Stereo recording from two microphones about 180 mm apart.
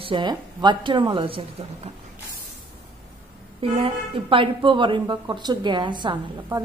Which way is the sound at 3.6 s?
30° right (ahead or behind).